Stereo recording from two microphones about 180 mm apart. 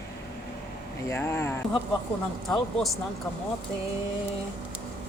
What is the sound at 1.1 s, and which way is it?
Speech, 15° left (ahead or behind).